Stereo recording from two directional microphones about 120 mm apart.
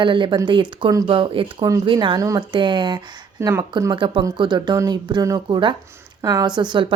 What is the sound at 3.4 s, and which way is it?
Speech, 25° right (ahead or behind).